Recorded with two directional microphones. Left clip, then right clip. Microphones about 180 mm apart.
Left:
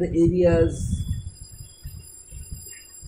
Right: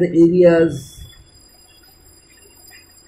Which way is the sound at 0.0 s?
5° right (ahead or behind).